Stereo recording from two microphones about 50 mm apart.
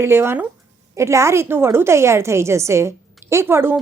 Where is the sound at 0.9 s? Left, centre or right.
Right.